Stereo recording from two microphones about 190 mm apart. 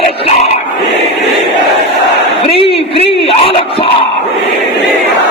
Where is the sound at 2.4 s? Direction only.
30° left (ahead or behind).